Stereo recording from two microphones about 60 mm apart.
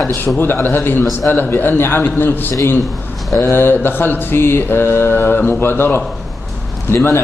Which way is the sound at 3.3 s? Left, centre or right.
Left.